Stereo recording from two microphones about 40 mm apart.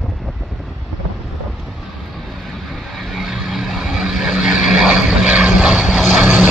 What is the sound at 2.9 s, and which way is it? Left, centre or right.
Vehicle, centre.